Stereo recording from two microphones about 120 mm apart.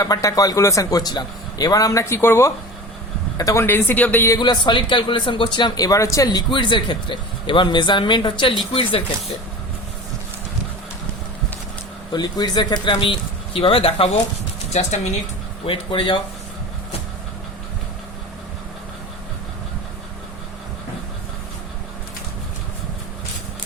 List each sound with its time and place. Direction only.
0.0 s a man's voice: 30° left (ahead or behind)
4.4 s speech: 40° left (ahead or behind)
12.1 s speech: 35° left (ahead or behind)
14.7 s speech: 70° left (ahead or behind)
15.6 s speech: 45° left (ahead or behind)